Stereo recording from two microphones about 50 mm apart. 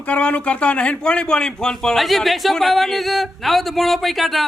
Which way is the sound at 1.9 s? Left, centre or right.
Centre.